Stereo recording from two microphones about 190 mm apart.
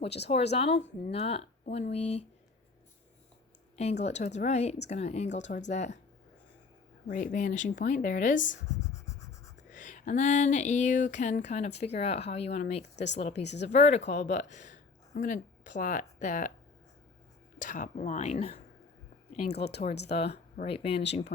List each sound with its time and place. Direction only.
0.0 s speech: 35° left (ahead or behind)
4.0 s speech: 35° left (ahead or behind)
7.1 s speech: 40° left (ahead or behind)
9.7 s speech: 40° left (ahead or behind)
17.6 s speech: 40° left (ahead or behind)